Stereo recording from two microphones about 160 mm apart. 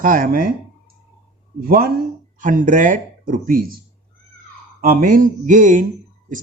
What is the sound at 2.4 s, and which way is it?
Speech, 55° right (ahead or behind).